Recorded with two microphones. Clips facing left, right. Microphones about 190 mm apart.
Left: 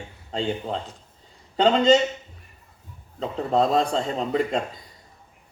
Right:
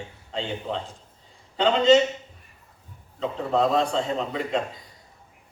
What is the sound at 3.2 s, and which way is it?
A man's voice, 40° left (ahead or behind).